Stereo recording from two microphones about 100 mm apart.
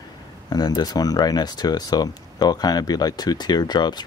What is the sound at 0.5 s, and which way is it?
Speech, 40° left (ahead or behind).